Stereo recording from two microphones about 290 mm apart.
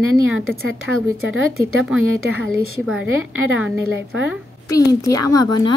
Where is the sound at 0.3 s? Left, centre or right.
Right.